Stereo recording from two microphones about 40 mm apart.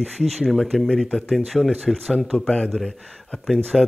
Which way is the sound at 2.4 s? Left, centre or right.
Centre.